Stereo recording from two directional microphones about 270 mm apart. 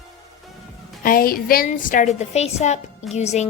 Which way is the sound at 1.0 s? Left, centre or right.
Left.